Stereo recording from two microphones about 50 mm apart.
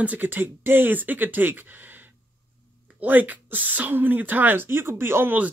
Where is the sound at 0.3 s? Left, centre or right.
Right.